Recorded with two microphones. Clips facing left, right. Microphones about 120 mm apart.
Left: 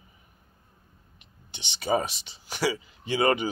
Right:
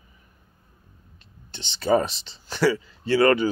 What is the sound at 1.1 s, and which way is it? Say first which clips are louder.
Speech: right 6 dB; 15° left (ahead or behind).